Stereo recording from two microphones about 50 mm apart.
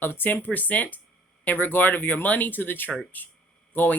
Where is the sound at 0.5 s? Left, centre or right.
Left.